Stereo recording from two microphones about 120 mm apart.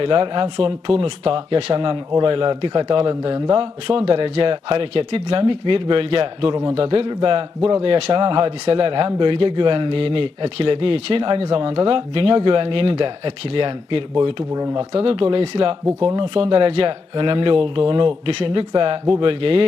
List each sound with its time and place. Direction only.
0.0 s a man's voice: 50° right (ahead or behind)
8.1 s a man's voice: 45° right (ahead or behind)
14.5 s speech: 30° right (ahead or behind)
14.8 s a man's voice: 50° right (ahead or behind)